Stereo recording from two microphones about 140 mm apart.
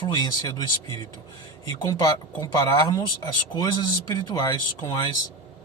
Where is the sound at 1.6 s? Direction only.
25° left (ahead or behind).